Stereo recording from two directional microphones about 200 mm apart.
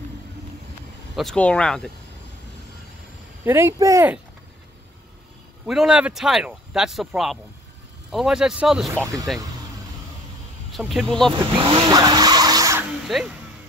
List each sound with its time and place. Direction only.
1.1 s speech: 5° left (ahead or behind)
3.4 s speech: 10° right (ahead or behind)
5.7 s speech: 5° right (ahead or behind)
10.7 s speech: centre (ahead or behind)
11.3 s vehicle: 25° right (ahead or behind)
13.0 s speech: 5° right (ahead or behind)